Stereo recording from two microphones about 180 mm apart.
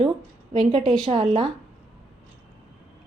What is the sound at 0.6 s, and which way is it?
Speech, 35° right (ahead or behind).